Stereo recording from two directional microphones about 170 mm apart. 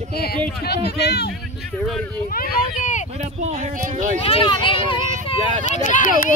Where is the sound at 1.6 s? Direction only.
Centre (ahead or behind).